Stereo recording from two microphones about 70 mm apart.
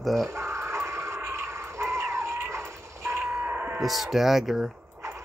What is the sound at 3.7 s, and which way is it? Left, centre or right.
Speech, centre.